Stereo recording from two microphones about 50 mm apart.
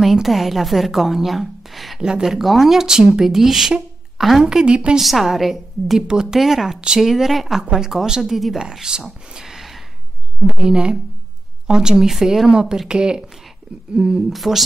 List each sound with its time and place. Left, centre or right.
0.0 s a woman's voice: centre
2.0 s a woman's voice: centre
4.5 s speech: centre
4.9 s speech: centre
10.4 s speech: centre
14.3 s speech: centre